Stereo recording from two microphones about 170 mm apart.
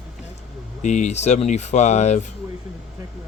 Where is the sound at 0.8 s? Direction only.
45° left (ahead or behind).